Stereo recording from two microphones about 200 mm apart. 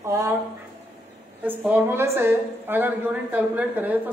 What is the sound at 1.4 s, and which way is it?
A woman's voice, 10° right (ahead or behind).